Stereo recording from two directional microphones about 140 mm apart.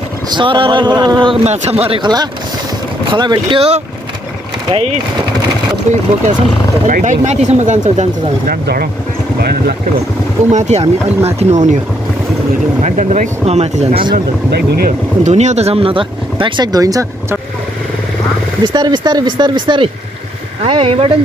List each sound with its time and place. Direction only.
0.3 s speech: 35° right (ahead or behind)
6.9 s speech: 65° right (ahead or behind)
10.5 s speech: 55° right (ahead or behind)
12.8 s speech: 60° right (ahead or behind); by 17.4 s 25° right (ahead or behind)
18.6 s speech: 30° right (ahead or behind)